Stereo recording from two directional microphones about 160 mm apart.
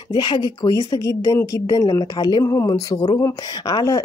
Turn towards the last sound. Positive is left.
turn(degrees=25)  # may be behind; listen again after turning